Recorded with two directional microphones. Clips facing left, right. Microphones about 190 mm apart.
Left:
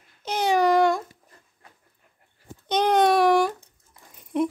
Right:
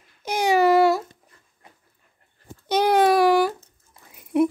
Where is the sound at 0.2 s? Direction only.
10° right (ahead or behind).